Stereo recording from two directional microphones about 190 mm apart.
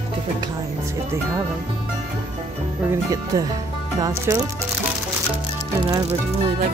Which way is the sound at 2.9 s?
15° right (ahead or behind).